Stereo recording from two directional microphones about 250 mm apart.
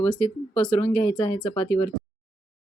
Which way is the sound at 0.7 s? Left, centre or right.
Left.